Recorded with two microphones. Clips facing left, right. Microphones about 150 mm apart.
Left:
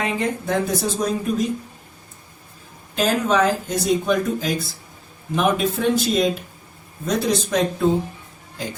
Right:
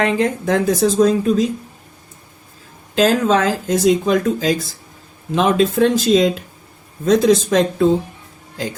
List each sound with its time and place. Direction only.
0.0 s speech: 90° right
2.9 s speech: 90° right